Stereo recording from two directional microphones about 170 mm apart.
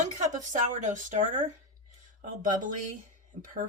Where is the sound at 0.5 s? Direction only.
50° right (ahead or behind).